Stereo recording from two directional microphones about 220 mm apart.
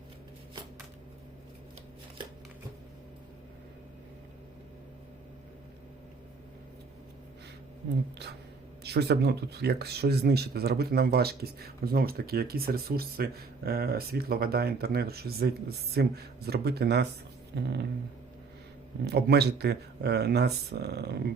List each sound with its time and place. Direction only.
8.8 s speech: 50° right (ahead or behind)
19.0 s speech: 50° right (ahead or behind)